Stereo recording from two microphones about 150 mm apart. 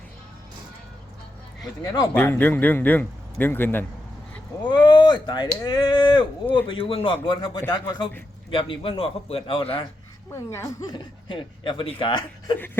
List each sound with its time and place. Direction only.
1.8 s speech: 25° left (ahead or behind)
2.1 s speech: 10° left (ahead or behind)
4.7 s speech: 30° left (ahead or behind)
10.3 s speech: 20° left (ahead or behind)